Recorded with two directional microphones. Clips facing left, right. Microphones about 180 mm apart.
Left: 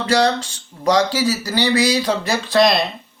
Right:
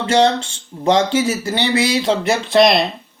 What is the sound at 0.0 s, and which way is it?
Speech, 25° right (ahead or behind).